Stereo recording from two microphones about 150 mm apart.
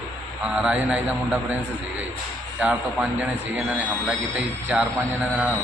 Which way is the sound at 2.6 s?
10° right (ahead or behind).